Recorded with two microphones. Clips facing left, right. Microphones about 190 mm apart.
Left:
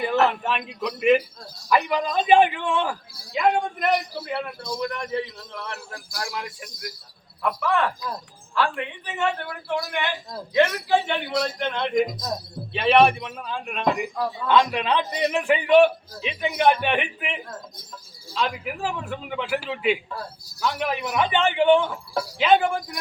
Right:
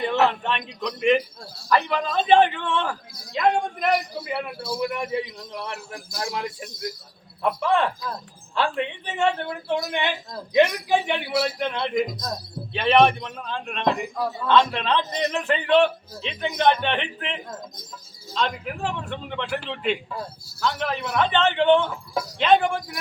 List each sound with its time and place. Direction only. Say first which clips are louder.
0.3 s a man's voice: even; 5° left (ahead or behind)